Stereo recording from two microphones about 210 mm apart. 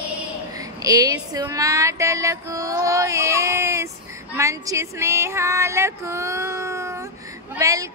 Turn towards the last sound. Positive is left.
turn(degrees=-15)  # may be behind; listen again after turning